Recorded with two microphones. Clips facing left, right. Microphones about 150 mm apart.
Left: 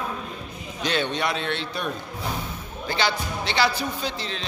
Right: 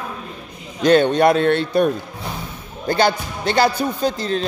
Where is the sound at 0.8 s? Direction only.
50° right (ahead or behind).